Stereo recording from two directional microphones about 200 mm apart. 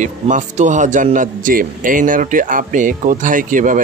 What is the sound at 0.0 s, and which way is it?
A man's voice, 40° right (ahead or behind).